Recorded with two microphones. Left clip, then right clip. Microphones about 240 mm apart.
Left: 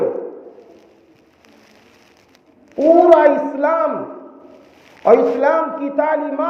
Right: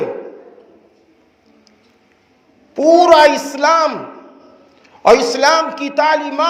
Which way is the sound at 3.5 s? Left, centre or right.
Right.